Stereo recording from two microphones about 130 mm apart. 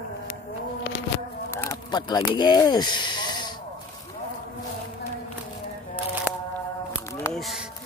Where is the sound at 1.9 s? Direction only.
35° left (ahead or behind).